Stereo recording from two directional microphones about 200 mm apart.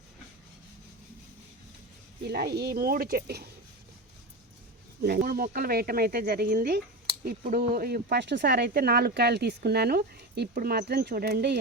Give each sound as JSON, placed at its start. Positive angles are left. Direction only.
{"t": 2.2, "sound": "speech", "side_deg": -55}
{"t": 5.0, "sound": "speech", "side_deg": -50}